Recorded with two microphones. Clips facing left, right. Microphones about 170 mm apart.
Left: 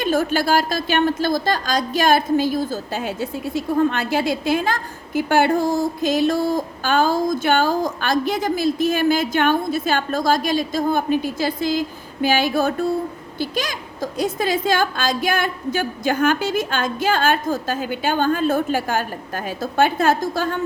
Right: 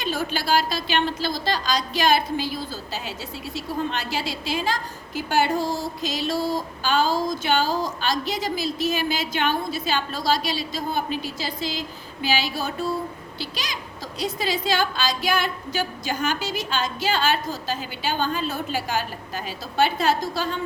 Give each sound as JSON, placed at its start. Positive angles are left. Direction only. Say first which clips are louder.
{"t": 0.0, "sound": "a woman's voice", "louder": "left 8 dB", "side_deg": 50}